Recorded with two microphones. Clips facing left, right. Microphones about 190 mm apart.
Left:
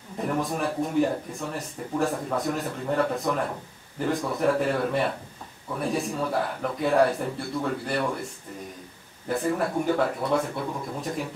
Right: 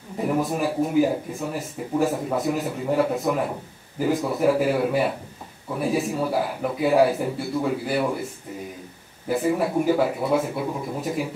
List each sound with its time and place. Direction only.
0.2 s a man's voice: 5° right (ahead or behind)
9.3 s a man's voice: 5° right (ahead or behind)